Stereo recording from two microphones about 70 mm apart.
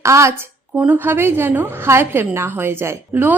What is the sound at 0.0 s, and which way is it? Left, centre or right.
Speech, right.